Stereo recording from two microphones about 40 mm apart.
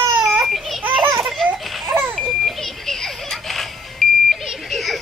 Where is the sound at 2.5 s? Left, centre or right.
Centre.